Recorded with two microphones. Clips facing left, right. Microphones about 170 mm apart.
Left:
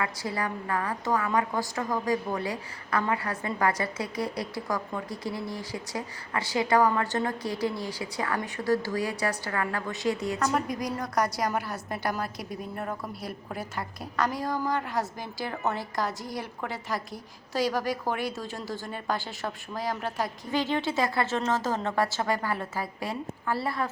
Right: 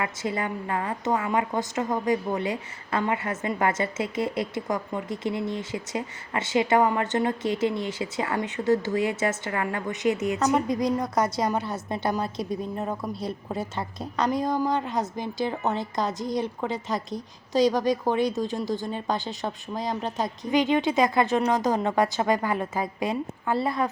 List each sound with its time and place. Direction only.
0.0 s a woman's voice: 20° right (ahead or behind)